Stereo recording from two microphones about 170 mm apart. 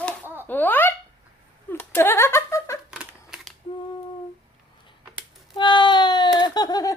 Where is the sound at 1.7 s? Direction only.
10° left (ahead or behind).